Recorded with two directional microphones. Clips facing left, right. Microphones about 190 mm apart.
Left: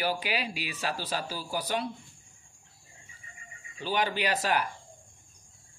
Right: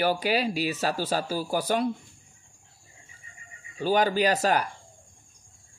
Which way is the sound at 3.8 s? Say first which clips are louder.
Right 7 dB; 40° right (ahead or behind).